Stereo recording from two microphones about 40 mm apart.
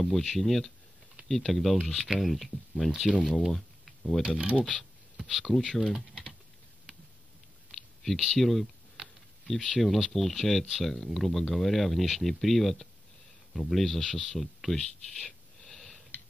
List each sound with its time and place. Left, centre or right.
0.0 s speech: centre
3.3 s a sound: centre
4.2 s speech: right
4.6 s speech: left
5.1 s a sound: centre
5.4 s speech: centre
7.7 s clicking: centre
8.4 s speech: centre
8.9 s a sound: centre
9.8 s speech: centre
15.1 s wheeze: centre